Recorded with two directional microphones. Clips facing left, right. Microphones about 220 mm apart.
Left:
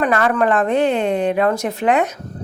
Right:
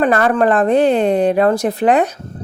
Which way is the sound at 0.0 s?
35° right (ahead or behind).